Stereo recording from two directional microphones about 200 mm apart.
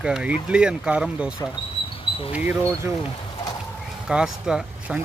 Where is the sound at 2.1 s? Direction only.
25° left (ahead or behind).